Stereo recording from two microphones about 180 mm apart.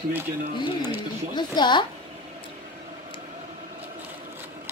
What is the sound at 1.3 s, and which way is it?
Speech, 25° left (ahead or behind).